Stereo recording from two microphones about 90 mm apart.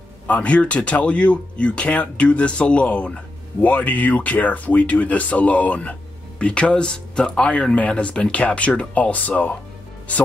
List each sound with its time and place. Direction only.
0.3 s speech: 15° left (ahead or behind)